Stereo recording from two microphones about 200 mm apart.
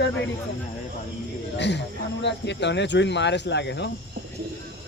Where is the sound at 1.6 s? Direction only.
60° left (ahead or behind).